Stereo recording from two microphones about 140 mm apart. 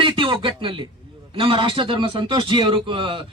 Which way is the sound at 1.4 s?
40° right (ahead or behind).